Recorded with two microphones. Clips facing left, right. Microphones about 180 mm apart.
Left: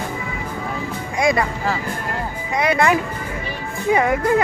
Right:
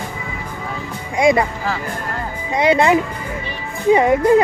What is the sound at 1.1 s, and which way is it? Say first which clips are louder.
Music: right 4 dB; 20° right (ahead or behind).